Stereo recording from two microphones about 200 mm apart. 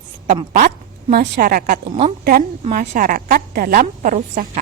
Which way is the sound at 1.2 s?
45° right (ahead or behind).